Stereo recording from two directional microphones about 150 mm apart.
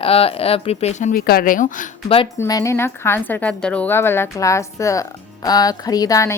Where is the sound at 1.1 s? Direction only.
85° left; by 1.9 s 60° left (ahead or behind).